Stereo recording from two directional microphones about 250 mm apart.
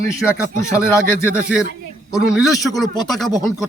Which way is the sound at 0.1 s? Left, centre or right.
Centre.